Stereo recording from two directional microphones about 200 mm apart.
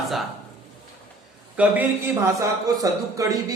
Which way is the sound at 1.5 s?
10° right (ahead or behind).